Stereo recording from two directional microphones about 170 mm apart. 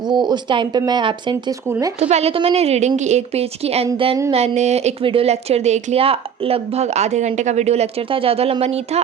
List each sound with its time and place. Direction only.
0.0 s speech: 25° right (ahead or behind)
1.6 s speech: 15° right (ahead or behind)
2.0 s a woman's voice: 40° right (ahead or behind)